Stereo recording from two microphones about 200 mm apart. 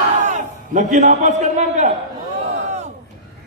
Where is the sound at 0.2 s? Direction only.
35° right (ahead or behind).